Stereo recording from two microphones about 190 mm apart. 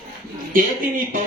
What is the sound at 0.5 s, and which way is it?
Speech, 45° right (ahead or behind).